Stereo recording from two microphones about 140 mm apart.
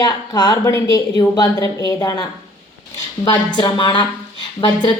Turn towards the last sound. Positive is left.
turn(degrees=35)  # may be behind; listen again after turning